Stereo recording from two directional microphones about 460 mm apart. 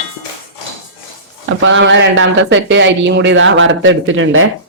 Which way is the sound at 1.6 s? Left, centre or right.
Right.